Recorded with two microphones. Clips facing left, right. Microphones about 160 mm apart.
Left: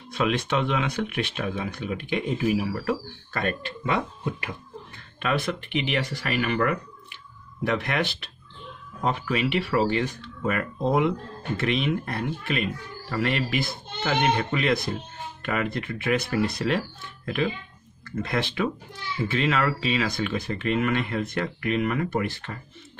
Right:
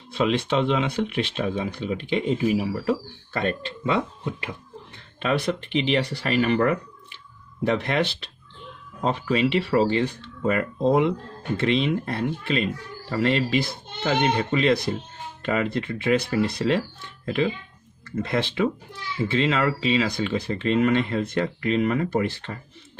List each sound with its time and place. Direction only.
0.1 s speech: 25° right (ahead or behind)
5.2 s speech: 30° right (ahead or behind)
18.1 s speech: 25° right (ahead or behind)